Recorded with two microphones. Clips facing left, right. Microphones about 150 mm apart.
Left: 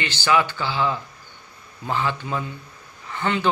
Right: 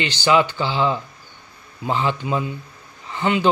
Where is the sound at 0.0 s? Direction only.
20° right (ahead or behind).